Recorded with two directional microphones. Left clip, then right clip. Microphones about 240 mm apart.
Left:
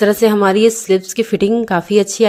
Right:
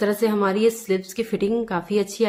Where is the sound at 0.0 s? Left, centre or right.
Left.